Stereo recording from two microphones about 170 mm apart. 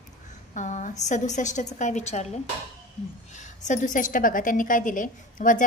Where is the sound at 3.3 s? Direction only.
45° left (ahead or behind).